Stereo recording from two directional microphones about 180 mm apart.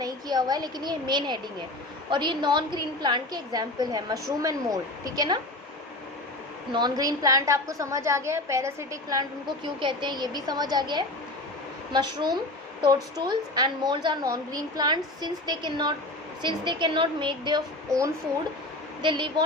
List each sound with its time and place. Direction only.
0.0 s a woman's voice: 20° right (ahead or behind)
6.7 s a woman's voice: 25° right (ahead or behind)